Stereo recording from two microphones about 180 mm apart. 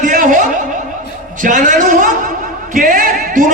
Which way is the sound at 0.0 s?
45° right (ahead or behind).